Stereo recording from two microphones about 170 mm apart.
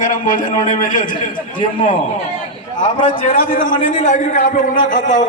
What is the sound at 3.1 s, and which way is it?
A man's voice, 50° left (ahead or behind).